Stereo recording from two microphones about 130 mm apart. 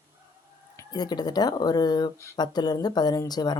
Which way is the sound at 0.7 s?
30° left (ahead or behind).